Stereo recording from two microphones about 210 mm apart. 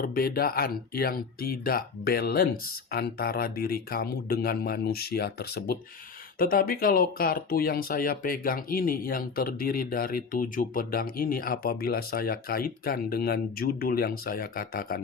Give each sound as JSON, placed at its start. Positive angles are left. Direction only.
{"t": 0.0, "sound": "speech", "side_deg": 45}